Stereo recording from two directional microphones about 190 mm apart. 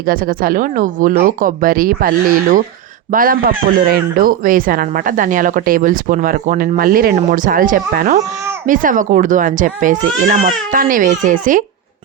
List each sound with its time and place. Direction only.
0.0 s speech: 50° right (ahead or behind)